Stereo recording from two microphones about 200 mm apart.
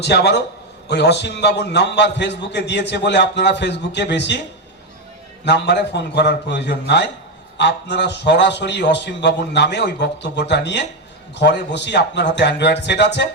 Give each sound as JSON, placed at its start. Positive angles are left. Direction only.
{"t": 0.0, "sound": "a man's voice", "side_deg": 55}
{"t": 5.5, "sound": "a man's voice", "side_deg": 60}